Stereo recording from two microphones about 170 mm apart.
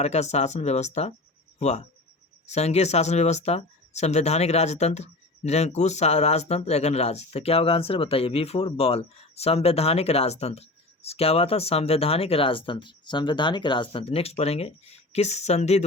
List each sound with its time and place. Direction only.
0.0 s speech: 40° left (ahead or behind)